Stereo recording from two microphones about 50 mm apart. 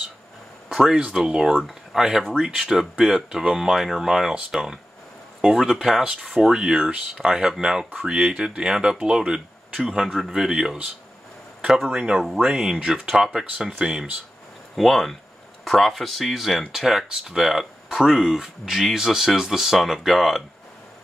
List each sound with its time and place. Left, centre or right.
0.7 s a sound: centre
0.9 s speech: centre
11.9 s speech: centre
14.8 s speech: centre